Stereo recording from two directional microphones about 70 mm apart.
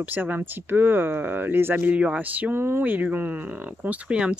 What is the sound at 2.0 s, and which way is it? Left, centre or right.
Speech, right.